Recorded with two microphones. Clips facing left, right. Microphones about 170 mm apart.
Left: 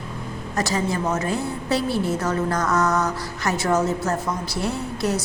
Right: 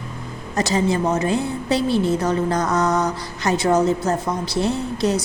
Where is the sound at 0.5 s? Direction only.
20° right (ahead or behind).